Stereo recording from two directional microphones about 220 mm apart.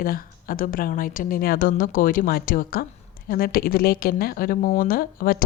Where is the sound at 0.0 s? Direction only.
40° left (ahead or behind).